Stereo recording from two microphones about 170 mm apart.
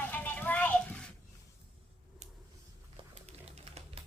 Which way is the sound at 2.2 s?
45° right (ahead or behind).